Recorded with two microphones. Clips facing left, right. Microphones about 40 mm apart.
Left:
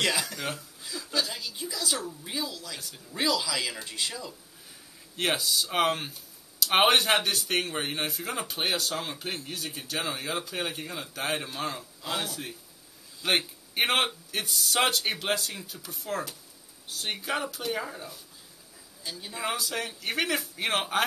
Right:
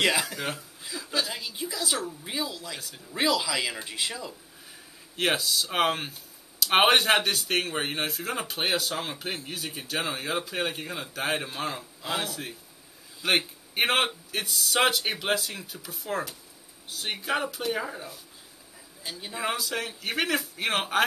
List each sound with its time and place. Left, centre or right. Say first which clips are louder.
0.0 s a man's voice: right 3 dB; centre
19.4 s speech: right 1 dB; centre